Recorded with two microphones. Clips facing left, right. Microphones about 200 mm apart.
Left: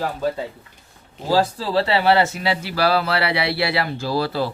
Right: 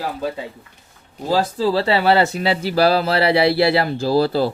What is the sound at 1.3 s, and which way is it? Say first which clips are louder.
Speech: right 1 dB; 25° right (ahead or behind).